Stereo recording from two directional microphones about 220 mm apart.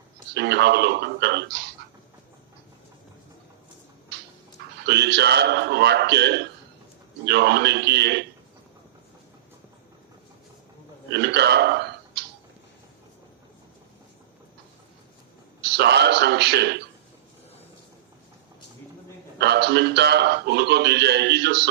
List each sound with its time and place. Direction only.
0.3 s a man's voice: 50° right (ahead or behind)
4.8 s a man's voice: 50° right (ahead or behind)
11.1 s burping: 50° right (ahead or behind)
15.6 s a man's voice: 50° right (ahead or behind)
19.4 s a man's voice: 50° right (ahead or behind)